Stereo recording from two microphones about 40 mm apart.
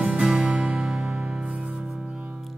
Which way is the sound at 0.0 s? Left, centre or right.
Right.